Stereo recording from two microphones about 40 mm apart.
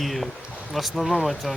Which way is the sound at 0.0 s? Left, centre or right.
Centre.